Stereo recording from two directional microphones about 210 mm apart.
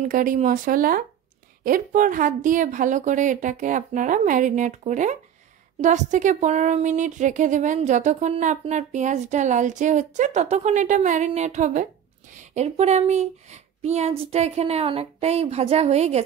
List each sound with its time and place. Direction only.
0.0 s speech: 40° right (ahead or behind)